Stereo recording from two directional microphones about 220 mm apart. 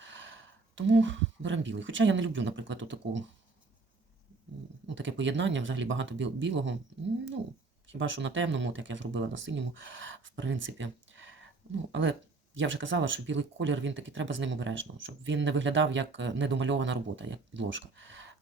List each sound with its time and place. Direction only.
0.0 s speech: 55° right (ahead or behind)
4.9 s speech: 55° right (ahead or behind)
7.9 s speech: 55° right (ahead or behind)